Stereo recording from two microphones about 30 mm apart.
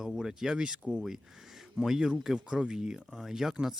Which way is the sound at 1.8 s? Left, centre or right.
Centre.